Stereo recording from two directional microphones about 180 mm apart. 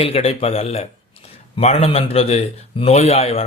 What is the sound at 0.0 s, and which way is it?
A man's voice, 35° left (ahead or behind).